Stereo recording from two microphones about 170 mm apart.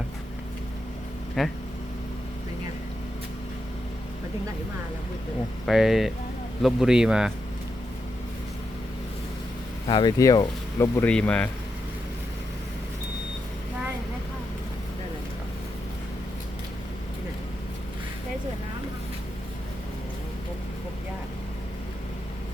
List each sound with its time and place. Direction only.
1.4 s speech: centre (ahead or behind)
5.6 s speech: centre (ahead or behind)
9.8 s speech: 25° left (ahead or behind); by 11.4 s 5° left (ahead or behind)